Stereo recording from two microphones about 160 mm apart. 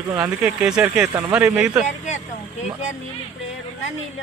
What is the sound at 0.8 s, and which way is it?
Speech, 15° right (ahead or behind).